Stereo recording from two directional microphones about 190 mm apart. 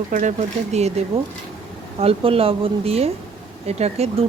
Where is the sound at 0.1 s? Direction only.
40° right (ahead or behind).